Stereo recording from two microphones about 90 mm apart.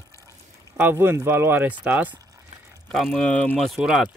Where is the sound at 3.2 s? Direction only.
15° left (ahead or behind).